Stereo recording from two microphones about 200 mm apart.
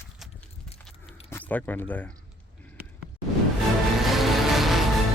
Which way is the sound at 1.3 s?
10° left (ahead or behind).